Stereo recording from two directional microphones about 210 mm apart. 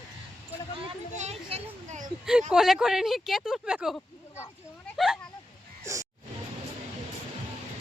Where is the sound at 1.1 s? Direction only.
30° right (ahead or behind).